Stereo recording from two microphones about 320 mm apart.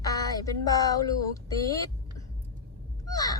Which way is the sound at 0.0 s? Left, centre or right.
Centre.